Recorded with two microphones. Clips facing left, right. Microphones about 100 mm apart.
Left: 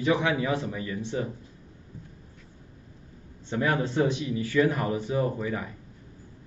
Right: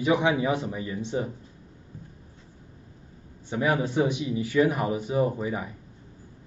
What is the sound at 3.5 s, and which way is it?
Speech, 10° right (ahead or behind).